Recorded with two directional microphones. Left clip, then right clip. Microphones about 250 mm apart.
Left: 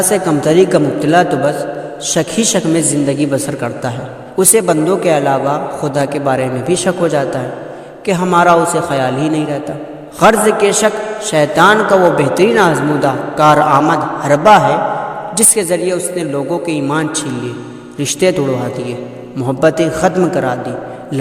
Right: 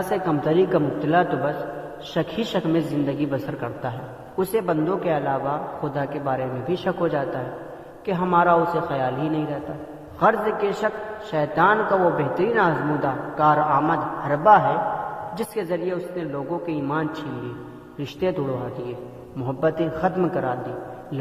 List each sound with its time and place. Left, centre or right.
0.1 s a man's voice: left